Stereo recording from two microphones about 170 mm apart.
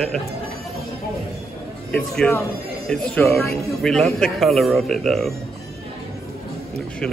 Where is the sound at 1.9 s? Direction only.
10° left (ahead or behind).